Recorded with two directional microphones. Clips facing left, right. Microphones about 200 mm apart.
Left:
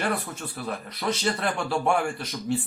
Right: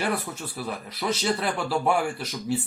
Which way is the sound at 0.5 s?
5° right (ahead or behind).